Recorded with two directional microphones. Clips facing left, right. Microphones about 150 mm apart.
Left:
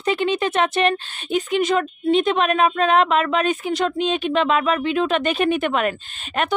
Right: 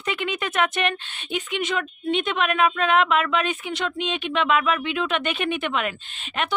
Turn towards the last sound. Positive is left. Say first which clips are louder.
# left 4 dB
turn(degrees=45)  # may be behind; listen again after turning